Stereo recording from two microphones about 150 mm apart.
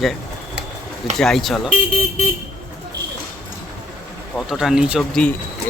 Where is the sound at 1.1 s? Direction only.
Centre (ahead or behind).